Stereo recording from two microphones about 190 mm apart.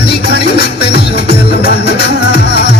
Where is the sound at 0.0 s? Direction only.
60° left (ahead or behind).